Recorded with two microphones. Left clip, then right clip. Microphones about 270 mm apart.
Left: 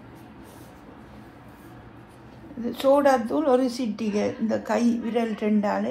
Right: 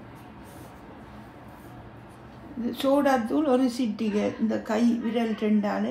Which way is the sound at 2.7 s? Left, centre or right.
Left.